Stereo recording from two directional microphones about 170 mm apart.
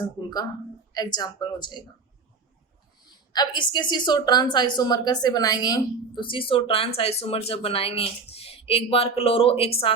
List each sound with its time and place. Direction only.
0.0 s speech: 25° left (ahead or behind)
3.3 s a woman's voice: 25° left (ahead or behind)